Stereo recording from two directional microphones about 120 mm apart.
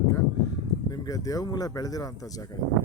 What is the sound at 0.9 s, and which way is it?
Speech, 30° left (ahead or behind).